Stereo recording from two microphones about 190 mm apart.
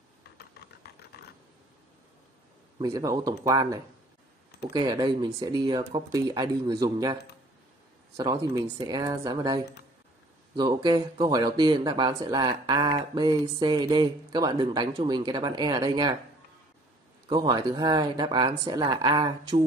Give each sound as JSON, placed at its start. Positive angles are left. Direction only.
{"t": 0.4, "sound": "typing", "side_deg": 60}
{"t": 2.8, "sound": "speech", "side_deg": -20}
{"t": 8.7, "sound": "speech", "side_deg": -20}
{"t": 17.3, "sound": "speech", "side_deg": -20}